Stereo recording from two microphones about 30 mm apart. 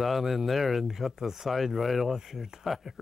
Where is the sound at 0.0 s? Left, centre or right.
Centre.